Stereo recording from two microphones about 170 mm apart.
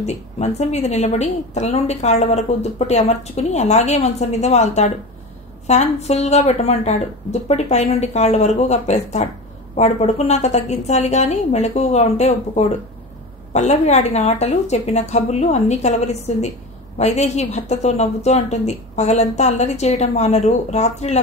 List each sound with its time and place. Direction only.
0.0 s a woman's voice: 40° left (ahead or behind)